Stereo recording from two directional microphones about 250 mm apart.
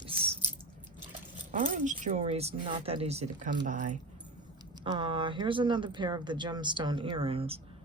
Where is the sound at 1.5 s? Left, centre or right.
Right.